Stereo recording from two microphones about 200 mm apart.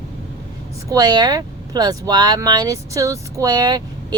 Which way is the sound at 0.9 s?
20° right (ahead or behind).